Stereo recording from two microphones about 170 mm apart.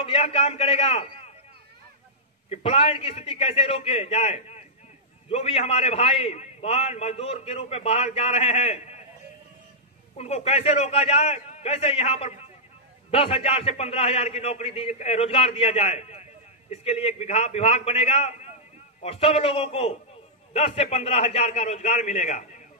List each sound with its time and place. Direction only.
0.0 s a man's voice: 35° left (ahead or behind)
2.5 s a man's voice: 35° left (ahead or behind)
10.1 s a man's voice: 35° left (ahead or behind)